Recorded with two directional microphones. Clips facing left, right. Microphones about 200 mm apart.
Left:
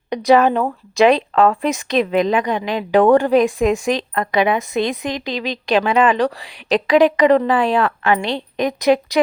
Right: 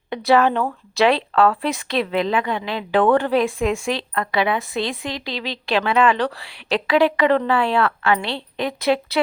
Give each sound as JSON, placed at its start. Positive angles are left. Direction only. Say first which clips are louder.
{"t": 0.1, "sound": "speech", "louder": "left 3 dB", "side_deg": 15}